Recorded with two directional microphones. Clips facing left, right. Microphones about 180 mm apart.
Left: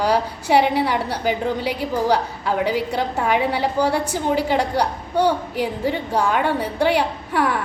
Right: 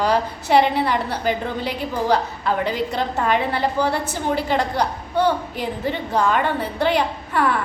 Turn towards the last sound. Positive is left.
turn(degrees=10)  # may be behind; listen again after turning